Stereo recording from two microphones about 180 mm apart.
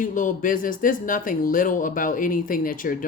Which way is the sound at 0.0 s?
45° left (ahead or behind).